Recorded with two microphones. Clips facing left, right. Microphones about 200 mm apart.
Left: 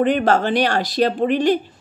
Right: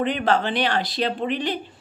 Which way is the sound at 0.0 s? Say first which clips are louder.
Left 5 dB; 45° left (ahead or behind).